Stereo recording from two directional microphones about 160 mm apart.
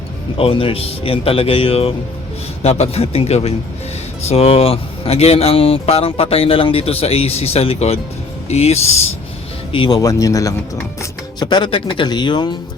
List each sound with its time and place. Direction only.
0.3 s speech: 35° left (ahead or behind)
9.7 s speech: 30° left (ahead or behind)
10.0 s speech: 20° left (ahead or behind)